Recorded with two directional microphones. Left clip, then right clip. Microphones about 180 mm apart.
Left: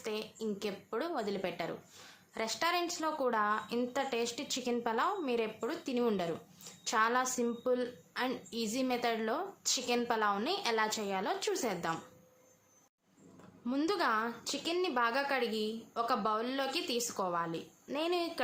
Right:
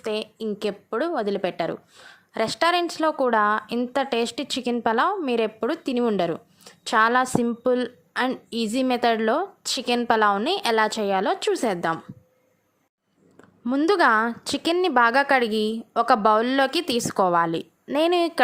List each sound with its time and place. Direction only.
0.0 s a woman's voice: 40° right (ahead or behind)
13.7 s a woman's voice: 45° right (ahead or behind)